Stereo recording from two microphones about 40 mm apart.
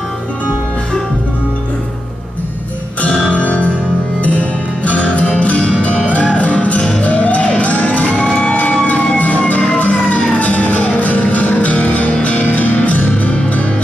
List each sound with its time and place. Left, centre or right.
3.3 s music: left
8.5 s emergency vehicle: left
9.8 s music: left